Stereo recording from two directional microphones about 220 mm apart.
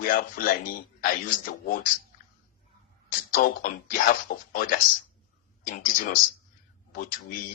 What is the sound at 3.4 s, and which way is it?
Speech, 45° left (ahead or behind).